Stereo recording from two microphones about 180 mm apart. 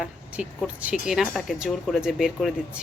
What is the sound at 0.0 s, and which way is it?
Speech, 5° right (ahead or behind).